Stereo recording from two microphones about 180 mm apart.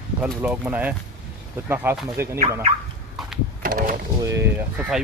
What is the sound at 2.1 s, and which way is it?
Speech, 15° right (ahead or behind).